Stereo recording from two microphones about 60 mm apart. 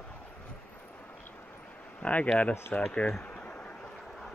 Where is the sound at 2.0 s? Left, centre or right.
Centre.